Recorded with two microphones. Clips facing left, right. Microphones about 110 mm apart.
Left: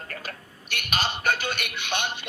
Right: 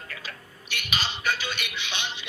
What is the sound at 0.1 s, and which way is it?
Speech, 50° left (ahead or behind).